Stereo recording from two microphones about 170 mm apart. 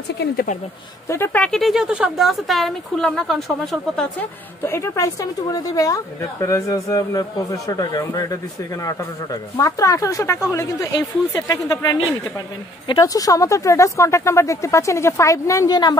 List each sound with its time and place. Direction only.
1.0 s speech: 15° left (ahead or behind)
4.6 s a woman's voice: 15° left (ahead or behind)